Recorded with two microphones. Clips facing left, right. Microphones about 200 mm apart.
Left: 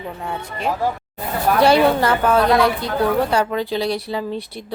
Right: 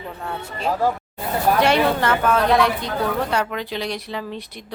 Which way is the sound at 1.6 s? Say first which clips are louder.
Left 4 dB; 35° left (ahead or behind).